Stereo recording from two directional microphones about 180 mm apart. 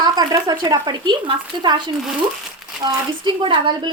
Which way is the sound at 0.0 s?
20° right (ahead or behind).